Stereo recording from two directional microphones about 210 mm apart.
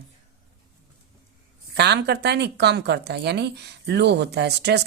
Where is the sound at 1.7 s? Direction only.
50° right (ahead or behind).